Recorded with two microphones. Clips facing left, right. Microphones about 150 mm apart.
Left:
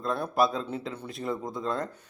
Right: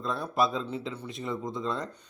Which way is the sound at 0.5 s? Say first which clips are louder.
Even; 45° left (ahead or behind).